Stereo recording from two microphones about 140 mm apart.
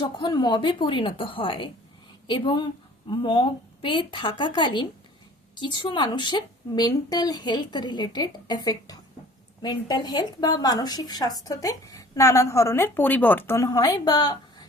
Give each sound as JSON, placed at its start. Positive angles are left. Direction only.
{"t": 0.0, "sound": "a woman's voice", "side_deg": 30}